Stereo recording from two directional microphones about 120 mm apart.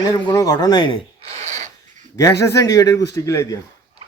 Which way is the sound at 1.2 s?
65° right (ahead or behind).